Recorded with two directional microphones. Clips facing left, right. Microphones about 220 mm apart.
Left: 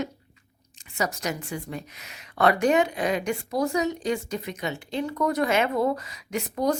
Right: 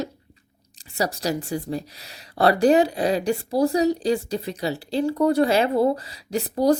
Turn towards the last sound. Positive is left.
turn(degrees=-35)  # may be behind; listen again after turning